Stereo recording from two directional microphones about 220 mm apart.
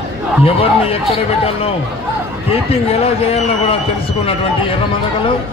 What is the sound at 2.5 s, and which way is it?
A man's voice, 25° left (ahead or behind).